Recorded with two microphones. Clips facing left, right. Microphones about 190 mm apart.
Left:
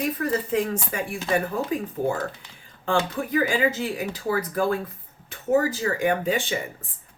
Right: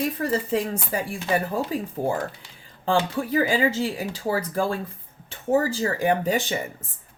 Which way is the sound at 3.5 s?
30° right (ahead or behind).